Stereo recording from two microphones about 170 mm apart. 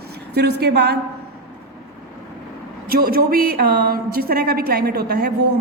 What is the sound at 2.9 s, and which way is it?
A woman's voice, 60° right (ahead or behind).